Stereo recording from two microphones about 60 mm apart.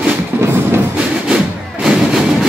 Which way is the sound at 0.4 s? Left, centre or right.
Right.